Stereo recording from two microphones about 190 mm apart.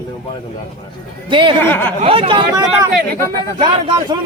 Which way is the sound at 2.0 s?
30° right (ahead or behind).